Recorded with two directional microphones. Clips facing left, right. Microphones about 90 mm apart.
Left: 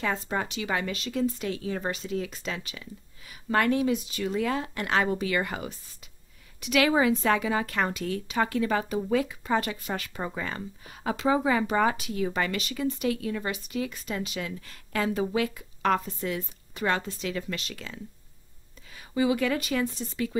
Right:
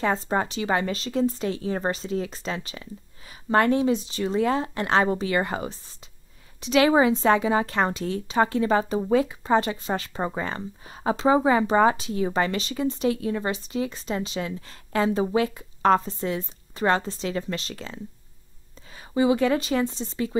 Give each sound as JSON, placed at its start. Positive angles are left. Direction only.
{"t": 0.0, "sound": "a woman's voice", "side_deg": -35}